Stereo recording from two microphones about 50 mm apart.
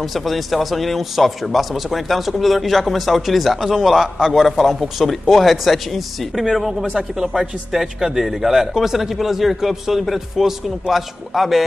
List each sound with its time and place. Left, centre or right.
0.0 s a man's voice: centre